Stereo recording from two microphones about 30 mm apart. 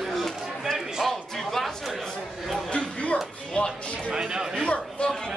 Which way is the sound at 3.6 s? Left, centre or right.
Left.